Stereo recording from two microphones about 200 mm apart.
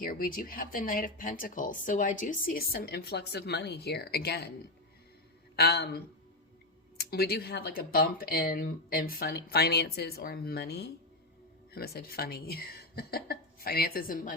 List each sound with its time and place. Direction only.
0.0 s speech: 45° left (ahead or behind)
5.5 s speech: 55° left (ahead or behind)